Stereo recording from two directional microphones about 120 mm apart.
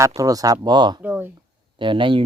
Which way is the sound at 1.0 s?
15° right (ahead or behind).